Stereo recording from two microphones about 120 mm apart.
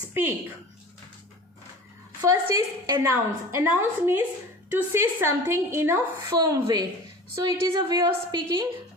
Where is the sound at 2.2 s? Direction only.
30° right (ahead or behind).